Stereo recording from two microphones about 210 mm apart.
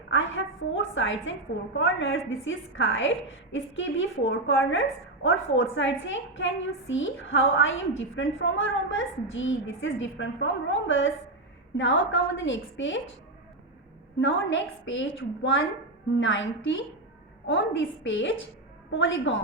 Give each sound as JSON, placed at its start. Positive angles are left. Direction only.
{"t": 0.1, "sound": "a woman's voice", "side_deg": 65}
{"t": 14.2, "sound": "a woman's voice", "side_deg": 65}